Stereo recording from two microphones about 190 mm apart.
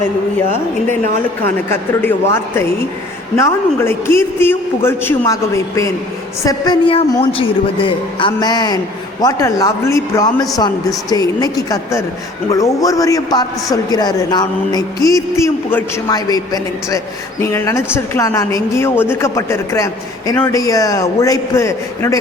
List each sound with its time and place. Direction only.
1.7 s a woman's voice: 10° left (ahead or behind)